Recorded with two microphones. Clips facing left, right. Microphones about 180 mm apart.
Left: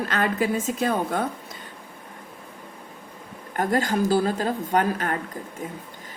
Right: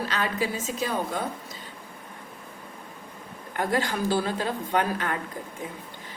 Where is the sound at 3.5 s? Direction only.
45° left (ahead or behind).